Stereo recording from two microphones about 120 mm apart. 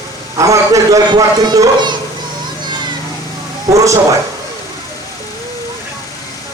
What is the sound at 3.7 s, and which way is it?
Speech, 25° right (ahead or behind).